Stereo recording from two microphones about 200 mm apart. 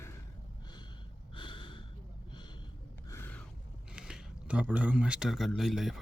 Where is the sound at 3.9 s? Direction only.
5° right (ahead or behind).